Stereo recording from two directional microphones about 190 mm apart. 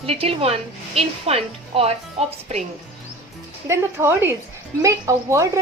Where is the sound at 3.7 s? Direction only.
10° right (ahead or behind).